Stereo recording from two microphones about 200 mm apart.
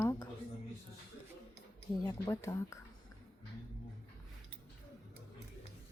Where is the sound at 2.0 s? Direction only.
15° left (ahead or behind).